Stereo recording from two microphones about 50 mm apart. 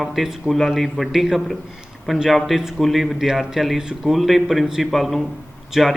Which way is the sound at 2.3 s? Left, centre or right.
Centre.